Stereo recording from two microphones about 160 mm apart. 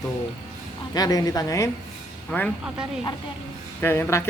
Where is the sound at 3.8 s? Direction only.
15° left (ahead or behind).